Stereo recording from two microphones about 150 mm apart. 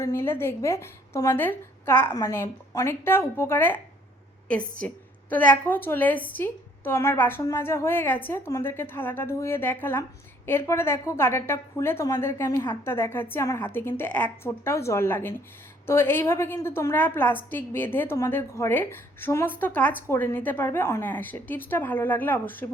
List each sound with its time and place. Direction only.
0.0 s a woman's voice: 15° left (ahead or behind)
4.8 s a woman's voice: 10° left (ahead or behind)